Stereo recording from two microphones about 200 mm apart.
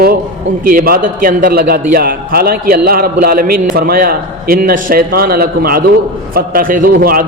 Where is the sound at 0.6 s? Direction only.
45° right (ahead or behind).